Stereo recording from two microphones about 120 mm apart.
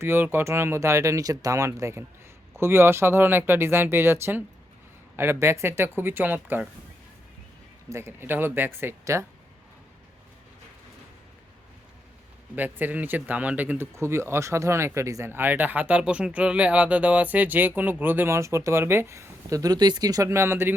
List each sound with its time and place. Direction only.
0.0 s speech: 20° right (ahead or behind)
7.9 s speech: 20° right (ahead or behind)
12.5 s speech: 15° right (ahead or behind)